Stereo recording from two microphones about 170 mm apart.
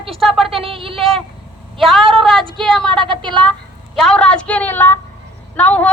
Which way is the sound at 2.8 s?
30° right (ahead or behind).